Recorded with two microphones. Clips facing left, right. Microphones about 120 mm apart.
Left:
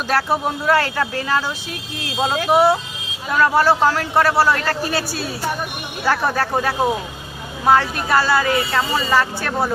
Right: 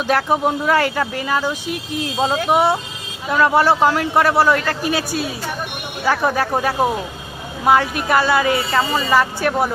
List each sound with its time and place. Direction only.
0.3 s speech: 15° right (ahead or behind)
2.3 s speech: centre (ahead or behind)
3.4 s speech: 20° right (ahead or behind)
3.9 s speech: 10° right (ahead or behind)
6.1 s speech: 10° right (ahead or behind)
8.7 s speech: 5° right (ahead or behind)